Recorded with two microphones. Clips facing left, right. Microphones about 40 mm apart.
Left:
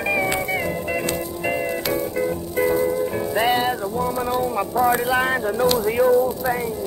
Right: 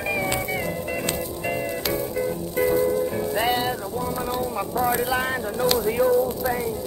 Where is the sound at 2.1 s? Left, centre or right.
Centre.